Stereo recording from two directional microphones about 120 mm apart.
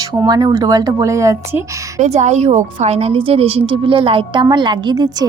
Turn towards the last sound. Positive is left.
turn(degrees=-35)  # may be behind; listen again after turning